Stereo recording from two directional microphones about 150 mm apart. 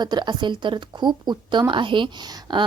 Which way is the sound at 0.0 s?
30° right (ahead or behind).